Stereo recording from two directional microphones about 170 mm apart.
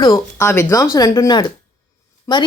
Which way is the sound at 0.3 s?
15° left (ahead or behind).